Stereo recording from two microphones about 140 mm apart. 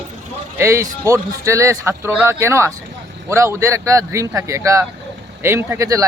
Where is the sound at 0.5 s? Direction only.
20° right (ahead or behind).